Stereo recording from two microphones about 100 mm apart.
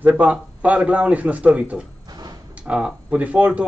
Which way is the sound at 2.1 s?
40° right (ahead or behind).